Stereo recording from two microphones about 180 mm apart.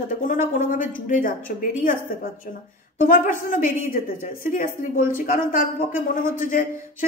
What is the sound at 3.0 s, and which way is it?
A woman's voice, 50° left (ahead or behind).